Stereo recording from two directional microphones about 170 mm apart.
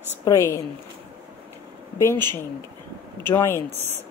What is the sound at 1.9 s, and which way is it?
Speech, 15° left (ahead or behind).